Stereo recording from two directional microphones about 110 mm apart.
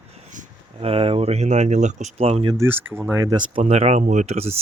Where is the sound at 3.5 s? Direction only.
70° right (ahead or behind).